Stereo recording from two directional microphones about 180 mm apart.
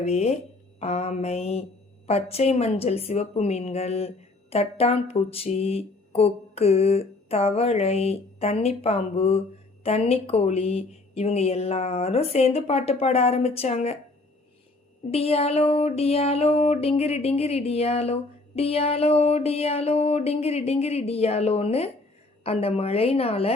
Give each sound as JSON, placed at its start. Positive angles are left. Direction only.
{"t": 0.0, "sound": "a woman's voice", "side_deg": 35}
{"t": 15.1, "sound": "a woman's voice", "side_deg": 35}